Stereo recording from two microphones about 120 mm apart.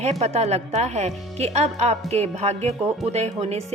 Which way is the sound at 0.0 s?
65° right (ahead or behind).